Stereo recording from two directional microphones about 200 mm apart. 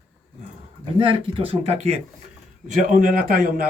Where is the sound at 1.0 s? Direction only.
25° right (ahead or behind); by 3.6 s 45° right (ahead or behind).